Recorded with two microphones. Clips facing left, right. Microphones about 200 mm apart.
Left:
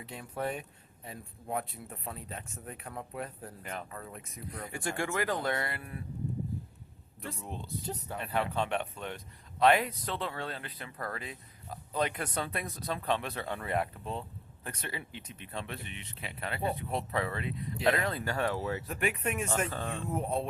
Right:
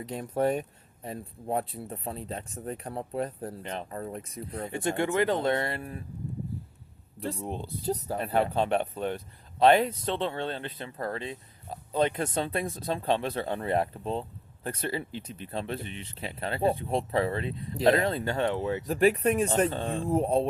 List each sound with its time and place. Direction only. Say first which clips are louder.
0.0 s speech: right 9 dB; 40° right (ahead or behind)
7.2 s speech: right 8 dB; 35° right (ahead or behind)
18.9 s speech: right 14 dB; 35° right (ahead or behind)